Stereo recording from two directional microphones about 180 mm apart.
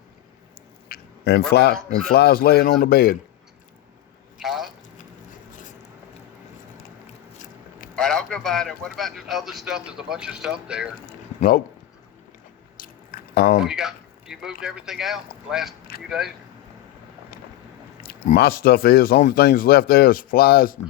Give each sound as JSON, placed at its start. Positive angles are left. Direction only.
{"t": 0.9, "sound": "a sound", "side_deg": 60}
{"t": 1.5, "sound": "speech", "side_deg": 65}
{"t": 4.4, "sound": "drip", "side_deg": 0}
{"t": 5.5, "sound": "biting", "side_deg": 45}
{"t": 7.3, "sound": "a sound", "side_deg": 45}
{"t": 7.9, "sound": "a man's voice", "side_deg": 5}
{"t": 11.3, "sound": "speech", "side_deg": 55}
{"t": 12.7, "sound": "chewing", "side_deg": 50}
{"t": 13.6, "sound": "a man's voice", "side_deg": -5}
{"t": 18.0, "sound": "speech", "side_deg": 55}